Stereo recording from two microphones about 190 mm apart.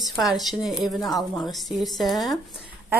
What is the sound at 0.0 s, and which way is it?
A woman's voice, centre (ahead or behind).